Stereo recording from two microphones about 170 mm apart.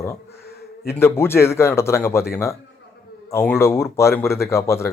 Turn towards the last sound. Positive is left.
turn(degrees=15)  # may be behind; listen again after turning